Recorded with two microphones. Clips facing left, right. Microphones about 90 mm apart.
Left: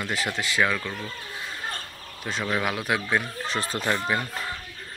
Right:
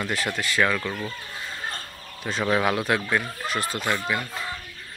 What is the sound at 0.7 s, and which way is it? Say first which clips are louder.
Speech: right 2 dB; centre (ahead or behind).